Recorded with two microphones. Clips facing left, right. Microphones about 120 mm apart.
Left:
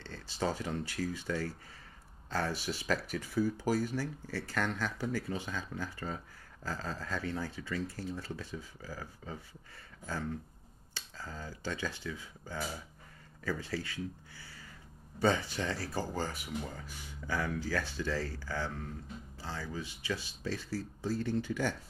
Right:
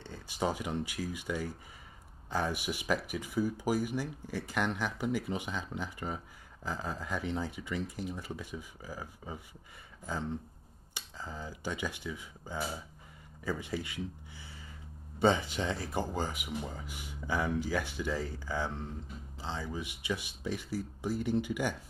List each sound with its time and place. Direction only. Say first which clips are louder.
0.0 s speech: right 1 dB; 15° right (ahead or behind)